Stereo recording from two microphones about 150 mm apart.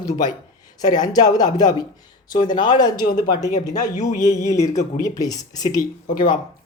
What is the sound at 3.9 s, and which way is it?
Speech, 60° left (ahead or behind).